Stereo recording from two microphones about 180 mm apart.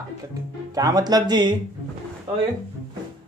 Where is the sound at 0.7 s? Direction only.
20° right (ahead or behind).